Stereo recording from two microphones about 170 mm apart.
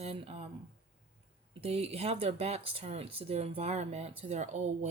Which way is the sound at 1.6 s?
35° right (ahead or behind).